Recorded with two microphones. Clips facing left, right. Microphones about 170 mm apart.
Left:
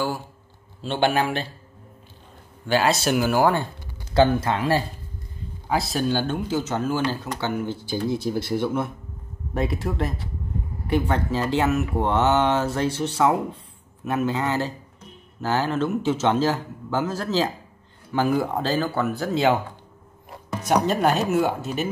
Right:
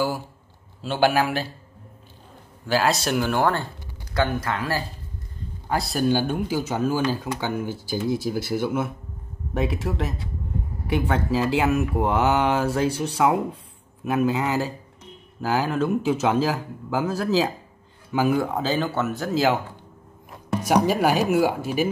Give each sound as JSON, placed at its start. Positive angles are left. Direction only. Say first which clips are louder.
{"t": 0.8, "sound": "speech", "louder": "right 1 dB", "side_deg": -5}
{"t": 2.6, "sound": "speech", "louder": "left 1 dB", "side_deg": 0}
{"t": 3.5, "sound": "speech", "louder": "left 3 dB", "side_deg": 20}
{"t": 5.7, "sound": "speech", "louder": "left 1 dB", "side_deg": 0}
{"t": 6.0, "sound": "speech", "louder": "right 2 dB", "side_deg": -15}
{"t": 20.6, "sound": "speech", "louder": "even", "side_deg": -10}